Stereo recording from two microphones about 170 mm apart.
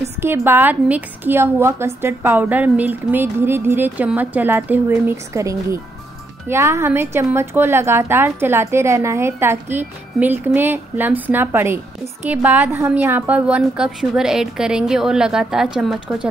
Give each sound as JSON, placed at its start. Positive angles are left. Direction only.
{"t": 0.2, "sound": "a woman's voice", "side_deg": -15}